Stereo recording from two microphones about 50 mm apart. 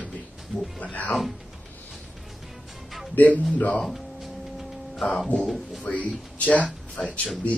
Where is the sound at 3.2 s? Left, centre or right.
Left.